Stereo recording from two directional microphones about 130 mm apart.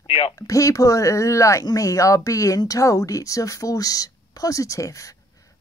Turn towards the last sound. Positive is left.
turn(degrees=25)  # may be behind; listen again after turning